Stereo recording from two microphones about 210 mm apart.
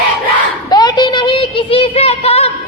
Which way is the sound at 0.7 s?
20° left (ahead or behind).